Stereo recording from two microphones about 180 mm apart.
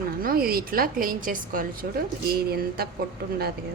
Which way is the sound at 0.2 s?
55° right (ahead or behind).